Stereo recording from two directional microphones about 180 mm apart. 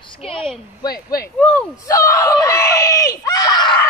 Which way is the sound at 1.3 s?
5° left (ahead or behind).